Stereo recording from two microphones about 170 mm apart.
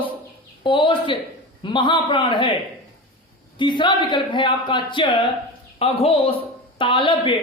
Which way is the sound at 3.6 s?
30° left (ahead or behind).